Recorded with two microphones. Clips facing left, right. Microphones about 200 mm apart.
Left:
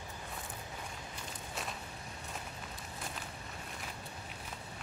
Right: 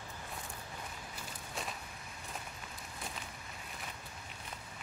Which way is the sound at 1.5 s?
Centre (ahead or behind).